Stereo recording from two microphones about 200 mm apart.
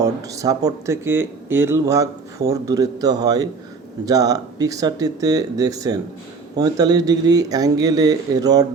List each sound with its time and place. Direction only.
0.0 s speech: 15° right (ahead or behind)